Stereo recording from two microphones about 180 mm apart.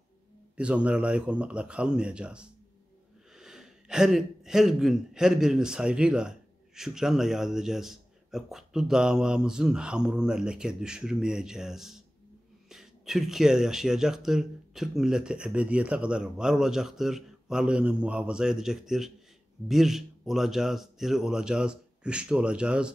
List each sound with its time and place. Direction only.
0.6 s speech: 5° right (ahead or behind)